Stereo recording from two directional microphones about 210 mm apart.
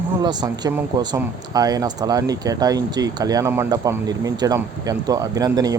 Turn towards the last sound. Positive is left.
turn(degrees=-15)  # may be behind; listen again after turning